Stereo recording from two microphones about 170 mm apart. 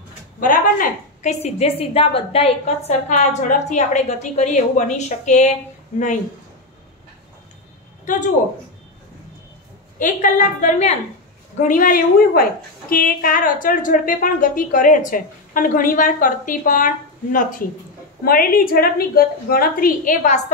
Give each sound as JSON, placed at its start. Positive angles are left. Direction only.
{"t": 0.4, "sound": "a woman's voice", "side_deg": 55}
{"t": 9.9, "sound": "a woman's voice", "side_deg": 50}